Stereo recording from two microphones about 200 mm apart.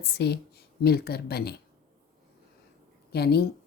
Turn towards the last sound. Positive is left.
turn(degrees=55)  # may be behind; listen again after turning